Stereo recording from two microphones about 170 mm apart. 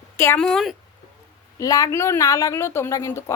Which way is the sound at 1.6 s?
20° left (ahead or behind).